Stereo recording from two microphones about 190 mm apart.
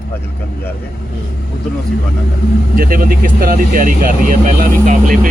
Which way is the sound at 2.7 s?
50° right (ahead or behind).